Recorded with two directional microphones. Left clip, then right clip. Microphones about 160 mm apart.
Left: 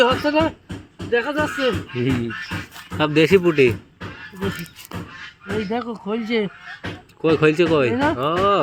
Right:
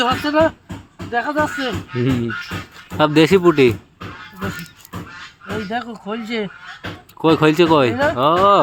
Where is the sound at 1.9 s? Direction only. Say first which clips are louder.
Right 2 dB; 40° right (ahead or behind).